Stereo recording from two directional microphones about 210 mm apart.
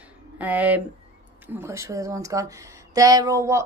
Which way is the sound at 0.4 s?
5° right (ahead or behind).